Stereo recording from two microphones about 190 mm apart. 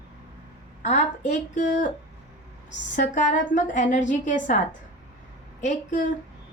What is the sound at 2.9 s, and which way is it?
A woman's voice, 40° left (ahead or behind).